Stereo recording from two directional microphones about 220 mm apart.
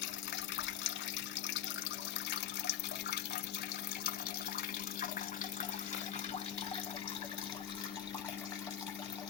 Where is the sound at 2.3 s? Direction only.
50° left (ahead or behind).